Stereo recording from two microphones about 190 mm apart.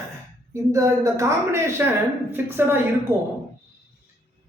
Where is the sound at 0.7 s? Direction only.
15° right (ahead or behind).